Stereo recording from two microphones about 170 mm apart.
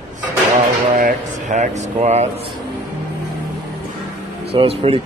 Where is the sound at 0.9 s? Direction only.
50° right (ahead or behind).